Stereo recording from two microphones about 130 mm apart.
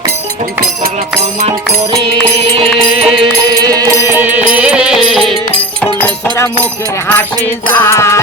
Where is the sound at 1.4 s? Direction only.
50° right (ahead or behind).